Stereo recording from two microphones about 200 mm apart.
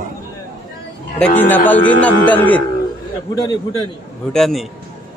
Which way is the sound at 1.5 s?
10° left (ahead or behind).